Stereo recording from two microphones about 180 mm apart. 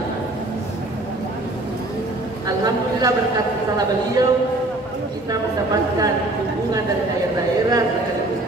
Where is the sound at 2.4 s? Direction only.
20° right (ahead or behind).